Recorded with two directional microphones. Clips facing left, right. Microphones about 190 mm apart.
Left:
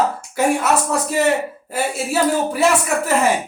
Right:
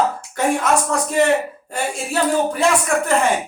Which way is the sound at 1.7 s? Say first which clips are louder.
Left 3 dB; 5° left (ahead or behind).